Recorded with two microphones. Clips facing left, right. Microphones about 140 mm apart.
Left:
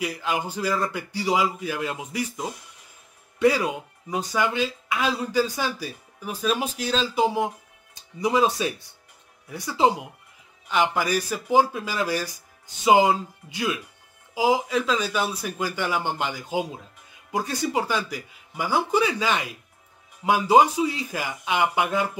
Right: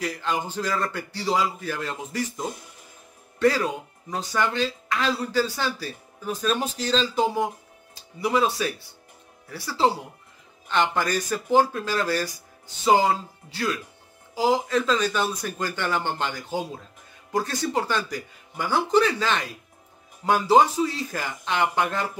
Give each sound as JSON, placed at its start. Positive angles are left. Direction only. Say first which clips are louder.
{"t": 0.0, "sound": "speech", "louder": "even", "side_deg": 10}
{"t": 8.2, "sound": "speech", "louder": "left 1 dB", "side_deg": 20}
{"t": 10.7, "sound": "speech", "louder": "left 1 dB", "side_deg": 5}